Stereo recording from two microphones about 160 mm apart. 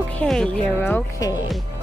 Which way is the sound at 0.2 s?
5° left (ahead or behind).